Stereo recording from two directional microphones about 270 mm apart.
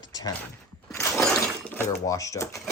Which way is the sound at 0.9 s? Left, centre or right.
Centre.